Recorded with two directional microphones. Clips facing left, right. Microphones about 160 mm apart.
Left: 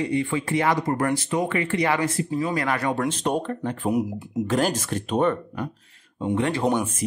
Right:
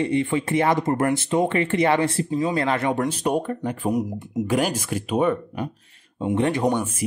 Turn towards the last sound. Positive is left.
turn(degrees=-20)  # may be behind; listen again after turning